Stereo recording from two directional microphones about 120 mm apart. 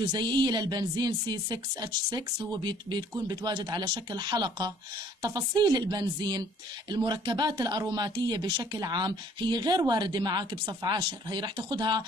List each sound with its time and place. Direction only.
0.0 s speech: 35° right (ahead or behind)